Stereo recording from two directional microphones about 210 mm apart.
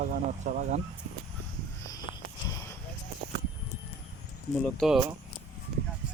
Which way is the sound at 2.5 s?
15° left (ahead or behind).